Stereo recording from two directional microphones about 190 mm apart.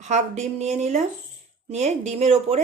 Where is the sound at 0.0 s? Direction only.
35° right (ahead or behind).